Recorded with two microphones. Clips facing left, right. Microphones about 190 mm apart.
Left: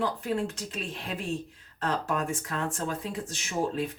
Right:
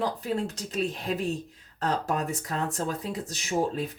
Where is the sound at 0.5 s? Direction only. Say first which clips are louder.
Right 6 dB; 40° right (ahead or behind).